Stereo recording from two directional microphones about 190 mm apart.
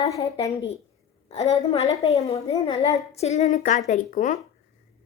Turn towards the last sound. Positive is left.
turn(degrees=40)  # may be behind; listen again after turning